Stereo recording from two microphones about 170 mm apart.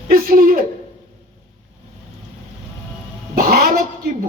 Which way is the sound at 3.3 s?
60° right (ahead or behind).